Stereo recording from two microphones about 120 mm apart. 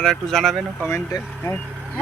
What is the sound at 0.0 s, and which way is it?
Speech, 5° left (ahead or behind).